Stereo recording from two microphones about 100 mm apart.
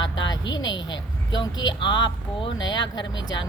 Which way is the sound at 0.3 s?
45° left (ahead or behind).